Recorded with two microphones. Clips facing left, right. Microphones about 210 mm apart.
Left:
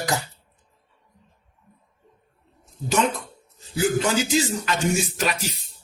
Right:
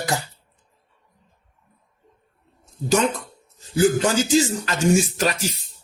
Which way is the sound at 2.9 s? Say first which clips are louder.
Right 3 dB; 40° right (ahead or behind).